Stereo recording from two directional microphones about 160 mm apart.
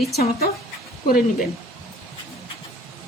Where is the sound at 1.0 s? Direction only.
65° left (ahead or behind).